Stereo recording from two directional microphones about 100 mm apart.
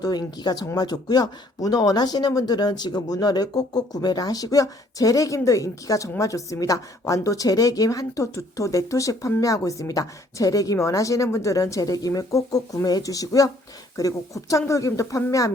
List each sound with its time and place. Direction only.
0.0 s speech: 45° left (ahead or behind)